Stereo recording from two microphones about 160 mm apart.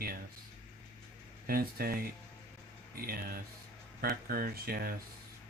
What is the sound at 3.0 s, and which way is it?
Speech, 65° right (ahead or behind).